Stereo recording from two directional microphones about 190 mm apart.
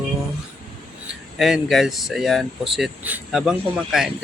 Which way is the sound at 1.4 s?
5° right (ahead or behind).